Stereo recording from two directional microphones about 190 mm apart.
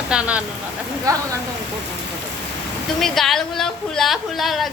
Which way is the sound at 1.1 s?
20° right (ahead or behind).